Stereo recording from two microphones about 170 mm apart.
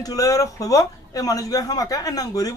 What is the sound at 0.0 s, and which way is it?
Speech, 20° left (ahead or behind).